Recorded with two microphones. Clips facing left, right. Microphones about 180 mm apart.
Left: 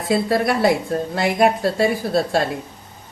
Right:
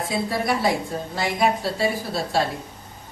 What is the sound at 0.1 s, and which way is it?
A woman's voice, 65° left (ahead or behind).